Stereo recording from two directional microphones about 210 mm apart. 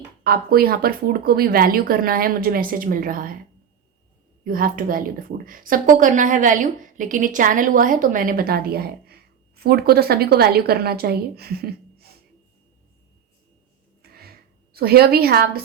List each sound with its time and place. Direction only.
0.3 s a woman's voice: 45° right (ahead or behind)
4.4 s a woman's voice: 40° right (ahead or behind)
14.0 s a sound: 45° right (ahead or behind)